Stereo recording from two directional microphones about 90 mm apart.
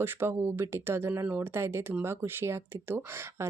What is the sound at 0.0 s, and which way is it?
Speech, 25° right (ahead or behind).